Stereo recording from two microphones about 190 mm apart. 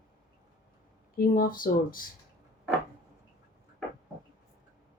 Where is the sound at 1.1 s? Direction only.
50° left (ahead or behind).